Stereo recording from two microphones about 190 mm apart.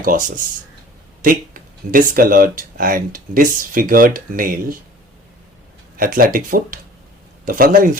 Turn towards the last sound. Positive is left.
turn(degrees=-50)  # may be behind; listen again after turning